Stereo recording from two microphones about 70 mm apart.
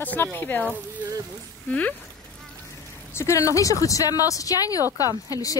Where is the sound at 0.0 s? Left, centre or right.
Left.